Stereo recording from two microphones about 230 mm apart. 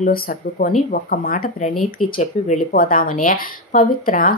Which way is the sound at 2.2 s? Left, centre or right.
Left.